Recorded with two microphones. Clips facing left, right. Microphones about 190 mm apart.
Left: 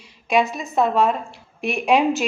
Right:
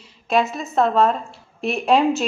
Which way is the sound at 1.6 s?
15° left (ahead or behind).